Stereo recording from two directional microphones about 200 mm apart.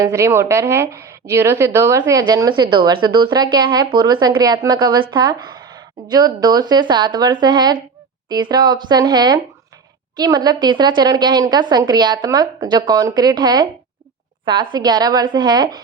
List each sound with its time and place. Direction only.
0.0 s a woman's voice: 15° right (ahead or behind)